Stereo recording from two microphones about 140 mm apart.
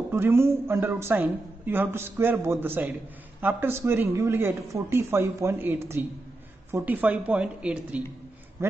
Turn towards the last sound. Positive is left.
turn(degrees=-10)  # may be behind; listen again after turning